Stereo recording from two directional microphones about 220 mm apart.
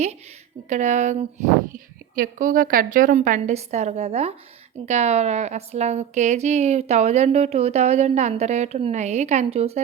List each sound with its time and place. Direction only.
0.7 s a woman's voice: 30° right (ahead or behind)